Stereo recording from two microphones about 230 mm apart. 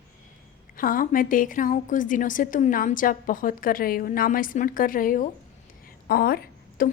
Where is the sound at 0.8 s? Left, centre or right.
Left.